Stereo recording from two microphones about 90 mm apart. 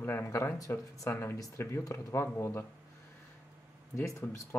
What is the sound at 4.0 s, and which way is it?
Speech, 35° left (ahead or behind).